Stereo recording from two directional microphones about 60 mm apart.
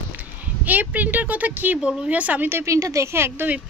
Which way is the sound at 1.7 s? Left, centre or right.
Centre.